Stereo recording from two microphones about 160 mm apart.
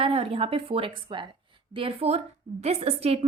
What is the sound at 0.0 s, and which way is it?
A woman's voice, 35° right (ahead or behind).